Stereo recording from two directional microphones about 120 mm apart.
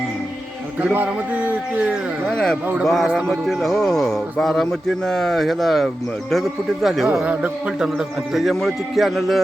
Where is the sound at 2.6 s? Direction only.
15° right (ahead or behind).